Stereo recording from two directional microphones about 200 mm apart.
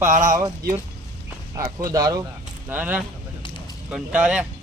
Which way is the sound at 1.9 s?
20° right (ahead or behind).